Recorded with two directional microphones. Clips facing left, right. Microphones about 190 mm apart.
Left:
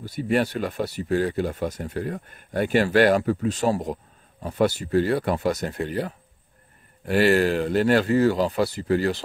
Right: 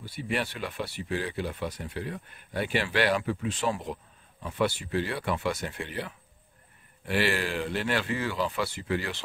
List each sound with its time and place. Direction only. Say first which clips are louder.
0.0 s speech: left 9 dB; 45° left (ahead or behind)